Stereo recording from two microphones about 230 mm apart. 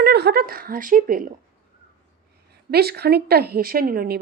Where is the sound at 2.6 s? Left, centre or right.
Right.